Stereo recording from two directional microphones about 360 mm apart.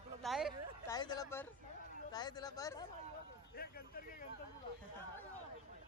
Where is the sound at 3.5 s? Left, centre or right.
Left.